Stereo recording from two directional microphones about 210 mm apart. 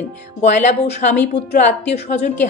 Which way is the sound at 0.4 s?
35° left (ahead or behind).